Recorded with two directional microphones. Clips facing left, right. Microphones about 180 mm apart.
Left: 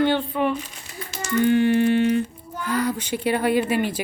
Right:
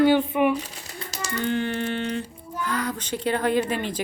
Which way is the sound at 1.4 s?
10° left (ahead or behind).